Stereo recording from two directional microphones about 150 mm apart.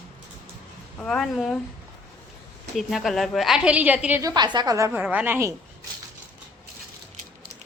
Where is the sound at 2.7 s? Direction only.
Centre (ahead or behind).